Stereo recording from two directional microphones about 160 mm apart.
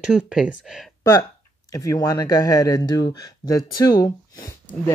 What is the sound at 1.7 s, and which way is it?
Speech, 20° left (ahead or behind).